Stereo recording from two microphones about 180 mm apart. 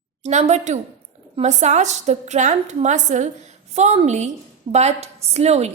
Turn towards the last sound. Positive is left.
turn(degrees=-35)  # may be behind; listen again after turning